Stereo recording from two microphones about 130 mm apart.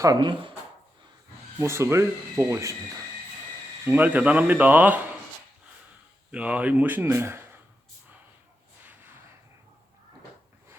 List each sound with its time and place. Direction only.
0.0 s speech: 30° right (ahead or behind)
1.5 s speech: 20° right (ahead or behind)
3.8 s speech: 15° right (ahead or behind)
6.3 s speech: 10° right (ahead or behind)
8.8 s a sound: 15° right (ahead or behind)